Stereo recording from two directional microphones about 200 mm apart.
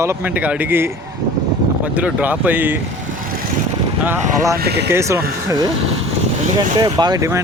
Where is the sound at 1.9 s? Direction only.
5° right (ahead or behind).